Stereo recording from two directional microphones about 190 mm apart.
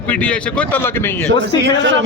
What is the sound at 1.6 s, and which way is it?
Speech, 70° right (ahead or behind).